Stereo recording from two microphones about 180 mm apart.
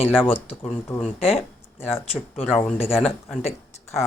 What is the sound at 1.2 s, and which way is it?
Speech, 35° left (ahead or behind).